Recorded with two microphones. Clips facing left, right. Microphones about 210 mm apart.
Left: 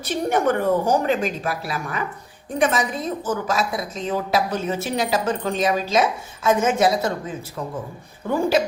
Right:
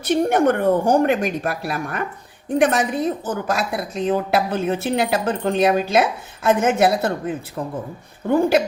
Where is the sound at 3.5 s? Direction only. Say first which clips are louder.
Right 1 dB; 60° right (ahead or behind).